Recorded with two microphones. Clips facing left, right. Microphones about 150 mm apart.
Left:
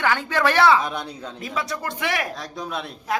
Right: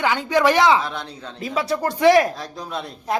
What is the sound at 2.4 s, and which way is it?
Speech, centre (ahead or behind).